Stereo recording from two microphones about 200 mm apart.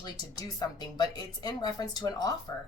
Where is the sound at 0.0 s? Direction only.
20° left (ahead or behind).